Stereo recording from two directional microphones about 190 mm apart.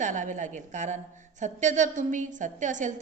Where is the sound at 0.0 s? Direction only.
40° right (ahead or behind).